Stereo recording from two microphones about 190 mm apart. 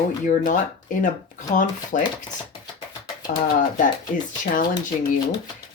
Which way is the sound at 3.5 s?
45° left (ahead or behind).